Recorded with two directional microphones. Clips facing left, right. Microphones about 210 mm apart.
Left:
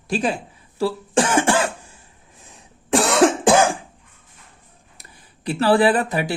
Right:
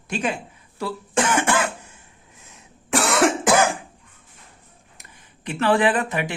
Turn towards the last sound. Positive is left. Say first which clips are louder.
# left 3 dB
turn(degrees=35)  # may be behind; listen again after turning